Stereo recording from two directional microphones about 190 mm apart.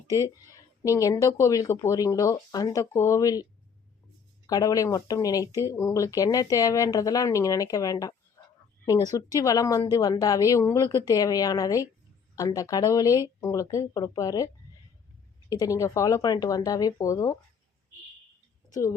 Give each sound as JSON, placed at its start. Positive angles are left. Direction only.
{"t": 0.1, "sound": "a woman's voice", "side_deg": 15}
{"t": 4.4, "sound": "a woman's voice", "side_deg": 20}
{"t": 18.7, "sound": "a woman's voice", "side_deg": 15}